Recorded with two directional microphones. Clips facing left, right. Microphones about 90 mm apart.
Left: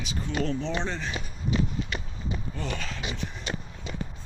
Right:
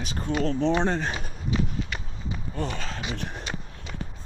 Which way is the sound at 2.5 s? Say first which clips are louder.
Right 2 dB; 45° right (ahead or behind).